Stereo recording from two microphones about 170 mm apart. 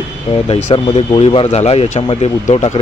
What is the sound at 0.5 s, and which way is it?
Speech, 30° left (ahead or behind).